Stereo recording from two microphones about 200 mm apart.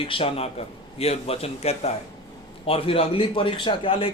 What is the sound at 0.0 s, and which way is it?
A man's voice, 25° left (ahead or behind).